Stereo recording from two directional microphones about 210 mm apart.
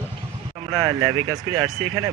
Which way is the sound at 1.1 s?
90° right.